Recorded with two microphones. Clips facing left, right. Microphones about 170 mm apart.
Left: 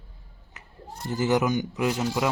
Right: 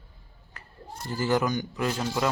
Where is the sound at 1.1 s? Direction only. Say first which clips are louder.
Left 2 dB; 20° left (ahead or behind).